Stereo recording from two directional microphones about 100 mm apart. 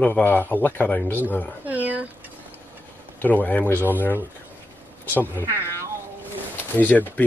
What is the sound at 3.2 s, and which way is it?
Speech, 15° left (ahead or behind).